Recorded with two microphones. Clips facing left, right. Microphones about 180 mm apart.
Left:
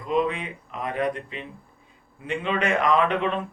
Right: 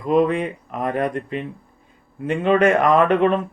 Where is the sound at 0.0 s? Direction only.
50° right (ahead or behind).